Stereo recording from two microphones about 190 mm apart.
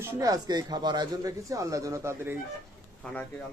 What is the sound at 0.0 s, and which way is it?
Speech, 15° right (ahead or behind).